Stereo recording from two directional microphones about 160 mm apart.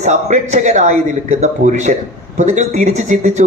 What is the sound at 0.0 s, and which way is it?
A man's voice, 45° right (ahead or behind).